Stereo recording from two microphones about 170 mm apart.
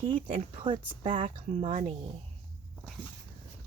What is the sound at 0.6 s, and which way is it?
Speech, 30° right (ahead or behind).